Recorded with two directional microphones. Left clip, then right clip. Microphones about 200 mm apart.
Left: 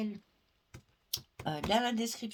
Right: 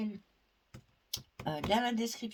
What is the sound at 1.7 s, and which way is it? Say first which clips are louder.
Speech: left 1 dB; 35° left (ahead or behind).